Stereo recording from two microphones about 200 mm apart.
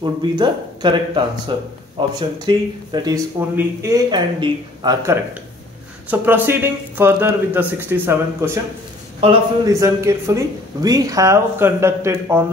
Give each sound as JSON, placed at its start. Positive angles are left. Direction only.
{"t": 0.0, "sound": "speech", "side_deg": -20}
{"t": 9.2, "sound": "speech", "side_deg": -30}
{"t": 9.7, "sound": "speech", "side_deg": -15}